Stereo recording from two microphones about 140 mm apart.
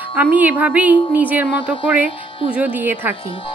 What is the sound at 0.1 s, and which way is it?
Speech, 10° right (ahead or behind).